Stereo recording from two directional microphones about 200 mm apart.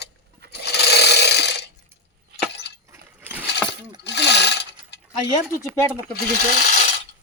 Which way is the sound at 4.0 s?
60° left (ahead or behind).